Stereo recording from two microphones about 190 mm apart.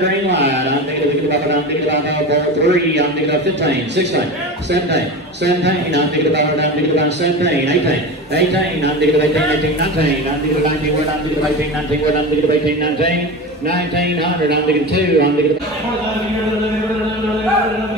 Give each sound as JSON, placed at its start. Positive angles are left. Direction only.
{"t": 0.0, "sound": "a sound", "side_deg": -65}
{"t": 2.6, "sound": "a man's voice", "side_deg": -65}
{"t": 14.5, "sound": "a man's voice", "side_deg": -60}